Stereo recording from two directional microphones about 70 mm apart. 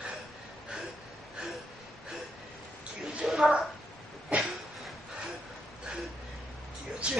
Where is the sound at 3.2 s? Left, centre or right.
Centre.